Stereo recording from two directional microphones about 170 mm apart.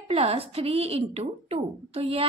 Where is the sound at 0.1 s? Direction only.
35° right (ahead or behind).